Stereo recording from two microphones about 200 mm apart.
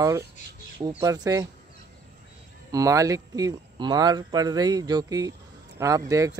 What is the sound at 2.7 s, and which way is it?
Speech, 15° right (ahead or behind).